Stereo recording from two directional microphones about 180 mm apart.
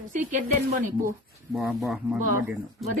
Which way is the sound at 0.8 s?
50° right (ahead or behind).